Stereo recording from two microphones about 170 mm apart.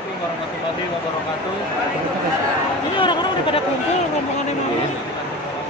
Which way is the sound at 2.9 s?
30° left (ahead or behind).